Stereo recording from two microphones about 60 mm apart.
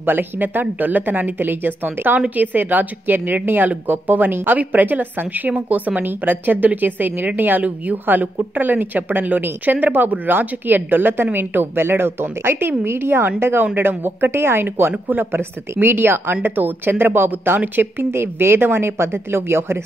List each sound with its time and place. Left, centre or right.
0.0 s a woman's voice: right